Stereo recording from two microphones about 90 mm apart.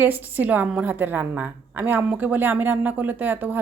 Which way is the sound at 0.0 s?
20° right (ahead or behind).